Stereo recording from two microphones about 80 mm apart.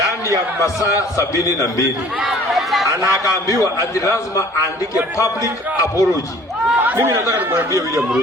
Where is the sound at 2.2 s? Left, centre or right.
Centre.